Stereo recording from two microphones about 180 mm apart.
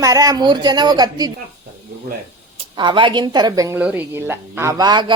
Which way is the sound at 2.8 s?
25° right (ahead or behind).